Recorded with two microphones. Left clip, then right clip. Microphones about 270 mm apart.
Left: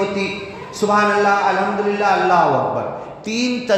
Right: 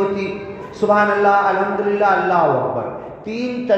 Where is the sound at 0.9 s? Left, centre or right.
Left.